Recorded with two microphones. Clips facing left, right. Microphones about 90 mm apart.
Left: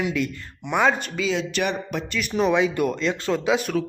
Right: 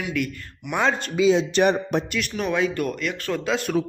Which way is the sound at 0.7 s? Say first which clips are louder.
Left 2 dB; 5° left (ahead or behind).